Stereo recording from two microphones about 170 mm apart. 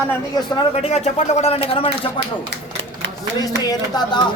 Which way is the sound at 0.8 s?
40° left (ahead or behind).